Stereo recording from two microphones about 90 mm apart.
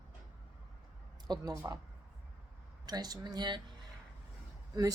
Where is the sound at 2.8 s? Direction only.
50° right (ahead or behind).